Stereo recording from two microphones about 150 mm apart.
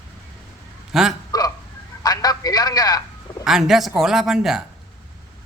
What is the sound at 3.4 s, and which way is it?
Speech, 5° right (ahead or behind).